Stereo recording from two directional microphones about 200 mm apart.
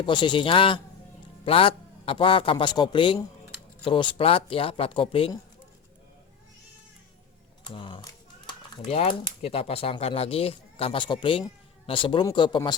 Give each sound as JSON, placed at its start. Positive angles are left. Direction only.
{"t": 0.0, "sound": "speech", "side_deg": 25}
{"t": 7.7, "sound": "a sound", "side_deg": 25}
{"t": 9.4, "sound": "speech", "side_deg": 30}